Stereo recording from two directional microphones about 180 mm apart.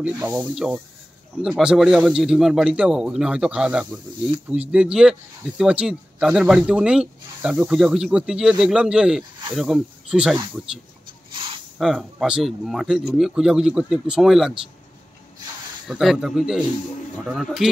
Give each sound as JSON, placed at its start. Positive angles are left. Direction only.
{"t": 0.0, "sound": "speech", "side_deg": -10}
{"t": 11.3, "sound": "a sound", "side_deg": -25}
{"t": 11.8, "sound": "speech", "side_deg": 0}
{"t": 15.9, "sound": "speech", "side_deg": 0}